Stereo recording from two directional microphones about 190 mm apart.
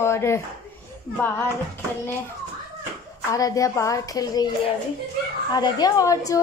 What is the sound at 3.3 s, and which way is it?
A woman's voice, 20° left (ahead or behind).